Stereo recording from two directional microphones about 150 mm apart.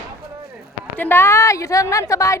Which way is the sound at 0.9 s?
15° left (ahead or behind).